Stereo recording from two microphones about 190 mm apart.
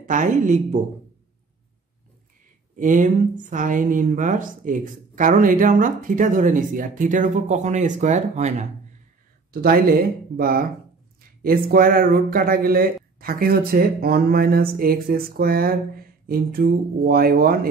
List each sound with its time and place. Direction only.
0.0 s a woman's voice: 40° right (ahead or behind)
2.8 s speech: 45° right (ahead or behind)
9.5 s speech: 50° right (ahead or behind)